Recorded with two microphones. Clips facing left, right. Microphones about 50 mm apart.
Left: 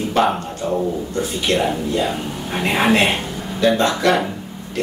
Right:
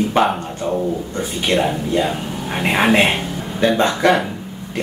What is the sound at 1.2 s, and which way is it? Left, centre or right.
Speech, centre.